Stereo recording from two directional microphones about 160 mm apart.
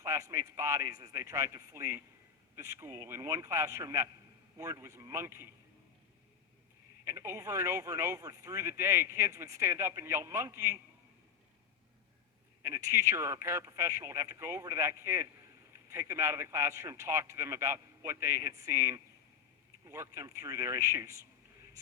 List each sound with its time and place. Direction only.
0.0 s speech: 20° right (ahead or behind)
7.0 s speech: 15° right (ahead or behind)
12.6 s speech: 15° right (ahead or behind)